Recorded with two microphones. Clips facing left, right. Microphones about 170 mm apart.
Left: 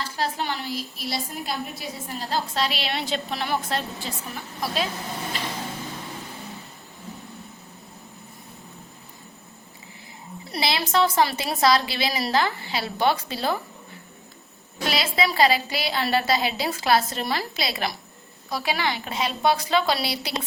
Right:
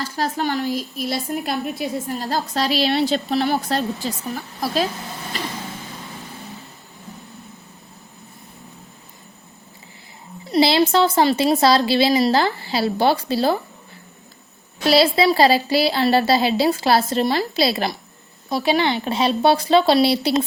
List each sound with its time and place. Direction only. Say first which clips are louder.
0.0 s a woman's voice: right 5 dB; 45° right (ahead or behind)
10.5 s a woman's voice: right 9 dB; 30° right (ahead or behind)
14.8 s a woman's voice: right 9 dB; 35° right (ahead or behind)